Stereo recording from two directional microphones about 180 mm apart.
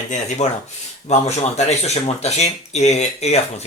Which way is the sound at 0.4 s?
40° left (ahead or behind).